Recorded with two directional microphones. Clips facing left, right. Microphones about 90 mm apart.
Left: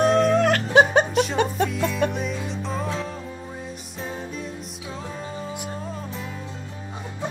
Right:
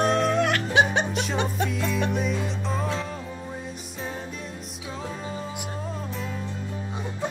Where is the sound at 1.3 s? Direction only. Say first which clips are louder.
Left 4 dB; 50° left (ahead or behind).